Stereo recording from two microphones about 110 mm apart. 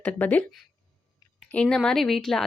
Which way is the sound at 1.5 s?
10° left (ahead or behind).